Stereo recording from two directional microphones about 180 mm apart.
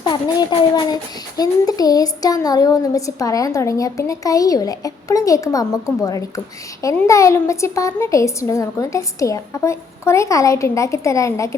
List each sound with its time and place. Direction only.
0.0 s a woman's voice: 25° left (ahead or behind)